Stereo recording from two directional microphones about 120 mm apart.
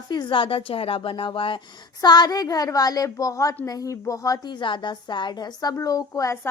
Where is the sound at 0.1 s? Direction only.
40° left (ahead or behind).